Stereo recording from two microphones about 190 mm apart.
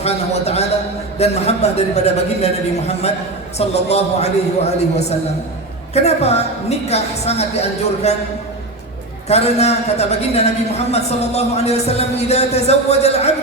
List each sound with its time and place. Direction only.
0.0 s a man's voice: 35° left (ahead or behind)
9.3 s a man's voice: 35° left (ahead or behind)